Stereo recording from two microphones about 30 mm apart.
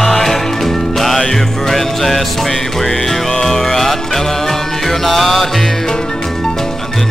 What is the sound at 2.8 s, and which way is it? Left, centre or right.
Music, centre.